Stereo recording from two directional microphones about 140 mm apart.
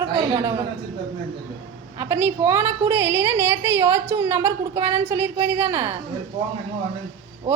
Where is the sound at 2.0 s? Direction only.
15° right (ahead or behind).